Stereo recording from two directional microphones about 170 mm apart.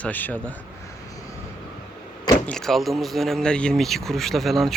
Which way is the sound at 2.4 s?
5° left (ahead or behind).